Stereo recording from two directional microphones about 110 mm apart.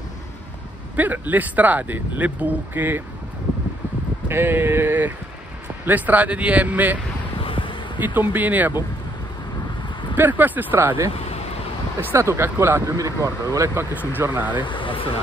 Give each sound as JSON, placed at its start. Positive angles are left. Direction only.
{"t": 0.9, "sound": "speech", "side_deg": -15}
{"t": 4.3, "sound": "speech", "side_deg": -20}
{"t": 7.3, "sound": "a sound", "side_deg": 50}
{"t": 8.0, "sound": "speech", "side_deg": -15}
{"t": 10.1, "sound": "speech", "side_deg": -15}
{"t": 12.1, "sound": "speech", "side_deg": -25}
{"t": 14.1, "sound": "speech", "side_deg": -15}
{"t": 14.6, "sound": "speech", "side_deg": 50}